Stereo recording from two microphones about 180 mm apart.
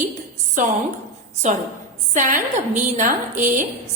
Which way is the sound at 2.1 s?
45° right (ahead or behind).